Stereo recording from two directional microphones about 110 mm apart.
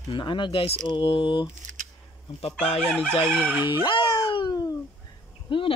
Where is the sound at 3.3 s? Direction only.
15° right (ahead or behind).